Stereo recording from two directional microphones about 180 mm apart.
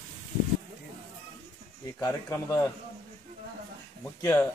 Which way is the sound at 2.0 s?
15° left (ahead or behind).